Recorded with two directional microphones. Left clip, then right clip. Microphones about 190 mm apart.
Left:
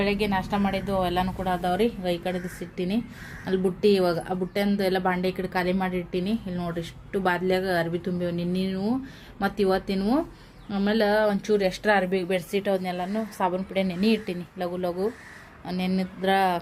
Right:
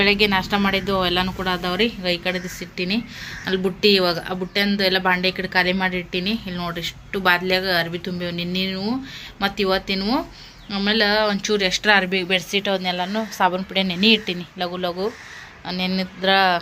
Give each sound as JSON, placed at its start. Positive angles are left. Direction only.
{"t": 0.0, "sound": "a woman's voice", "side_deg": 0}